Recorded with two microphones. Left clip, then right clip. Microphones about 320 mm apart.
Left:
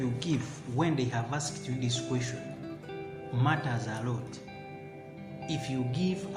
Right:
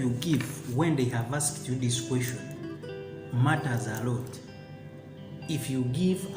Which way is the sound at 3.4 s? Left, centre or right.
Left.